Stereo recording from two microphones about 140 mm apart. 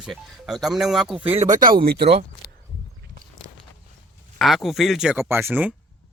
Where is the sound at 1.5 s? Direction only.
85° right.